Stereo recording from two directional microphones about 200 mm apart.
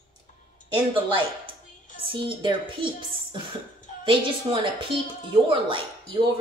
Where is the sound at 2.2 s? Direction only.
25° right (ahead or behind).